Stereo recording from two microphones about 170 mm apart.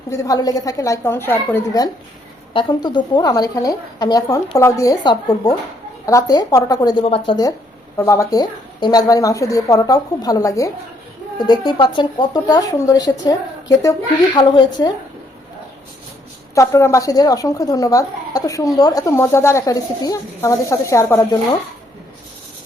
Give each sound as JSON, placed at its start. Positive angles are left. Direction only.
{"t": 0.1, "sound": "speech", "side_deg": 20}
{"t": 2.5, "sound": "speech", "side_deg": 30}
{"t": 16.6, "sound": "speech", "side_deg": 20}